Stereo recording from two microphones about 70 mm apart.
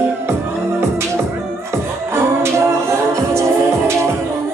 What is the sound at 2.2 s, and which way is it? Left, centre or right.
Music, right.